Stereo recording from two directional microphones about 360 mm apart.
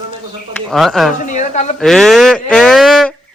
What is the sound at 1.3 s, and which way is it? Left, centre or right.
Speech, centre.